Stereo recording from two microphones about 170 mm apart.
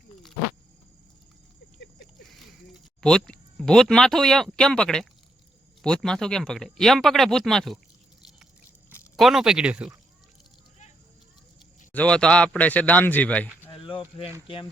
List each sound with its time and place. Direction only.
2.3 s speech: centre (ahead or behind)
9.1 s speech: centre (ahead or behind)
11.9 s speech: 5° left (ahead or behind)
13.7 s a sound: 30° left (ahead or behind)
14.4 s speech: 30° left (ahead or behind)